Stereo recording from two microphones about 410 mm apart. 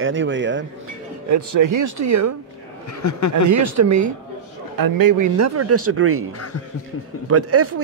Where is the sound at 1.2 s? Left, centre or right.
Right.